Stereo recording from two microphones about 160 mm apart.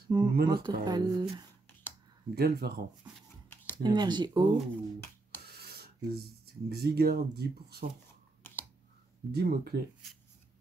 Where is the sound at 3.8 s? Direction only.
25° right (ahead or behind).